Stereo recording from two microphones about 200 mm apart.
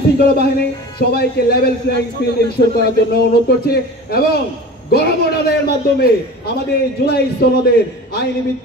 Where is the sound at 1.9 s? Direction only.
55° left (ahead or behind).